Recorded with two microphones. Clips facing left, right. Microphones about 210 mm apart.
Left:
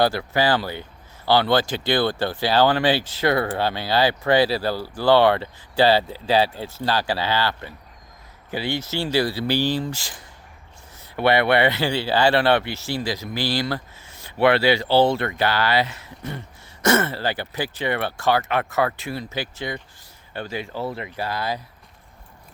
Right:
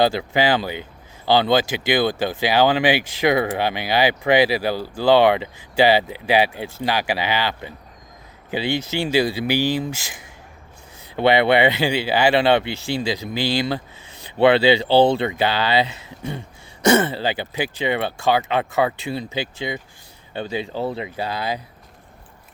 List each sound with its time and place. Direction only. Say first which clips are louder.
0.0 s speech: right 2 dB; 15° right (ahead or behind)
11.2 s speech: right 2 dB; 20° right (ahead or behind)